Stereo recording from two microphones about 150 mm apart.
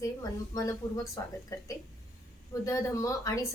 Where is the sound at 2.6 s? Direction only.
20° left (ahead or behind).